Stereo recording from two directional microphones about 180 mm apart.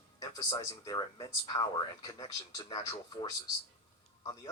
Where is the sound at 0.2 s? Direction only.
25° left (ahead or behind).